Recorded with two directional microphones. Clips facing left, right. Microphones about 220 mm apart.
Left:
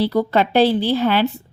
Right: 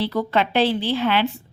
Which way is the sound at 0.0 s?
40° left (ahead or behind).